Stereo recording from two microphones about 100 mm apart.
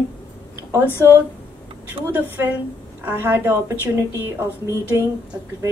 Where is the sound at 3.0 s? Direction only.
20° right (ahead or behind).